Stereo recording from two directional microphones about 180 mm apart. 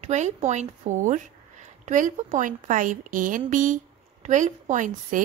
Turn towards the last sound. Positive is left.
turn(degrees=-45)  # may be behind; listen again after turning